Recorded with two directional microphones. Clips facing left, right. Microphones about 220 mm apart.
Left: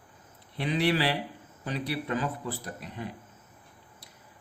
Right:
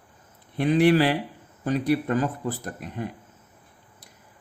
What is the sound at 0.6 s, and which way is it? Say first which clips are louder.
Speech: right 8 dB; 50° right (ahead or behind).